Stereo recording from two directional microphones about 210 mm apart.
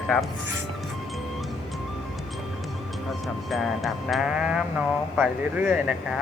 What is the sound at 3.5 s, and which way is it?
Music, centre (ahead or behind).